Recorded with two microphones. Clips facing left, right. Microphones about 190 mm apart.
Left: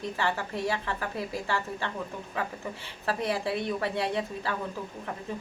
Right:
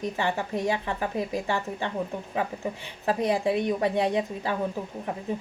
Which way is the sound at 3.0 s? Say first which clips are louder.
Right 5 dB; 15° right (ahead or behind).